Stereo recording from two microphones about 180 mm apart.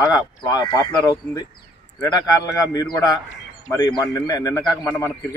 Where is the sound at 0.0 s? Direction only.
20° left (ahead or behind).